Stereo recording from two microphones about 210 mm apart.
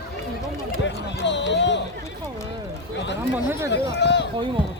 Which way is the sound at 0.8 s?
55° left (ahead or behind).